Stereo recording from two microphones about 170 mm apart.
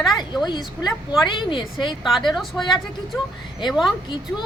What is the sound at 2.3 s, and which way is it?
Speech, centre (ahead or behind).